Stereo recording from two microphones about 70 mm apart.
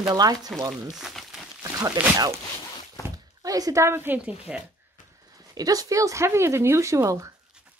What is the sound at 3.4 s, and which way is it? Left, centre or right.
Speech, right.